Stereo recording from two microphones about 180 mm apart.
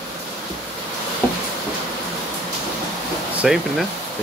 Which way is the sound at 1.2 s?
10° left (ahead or behind).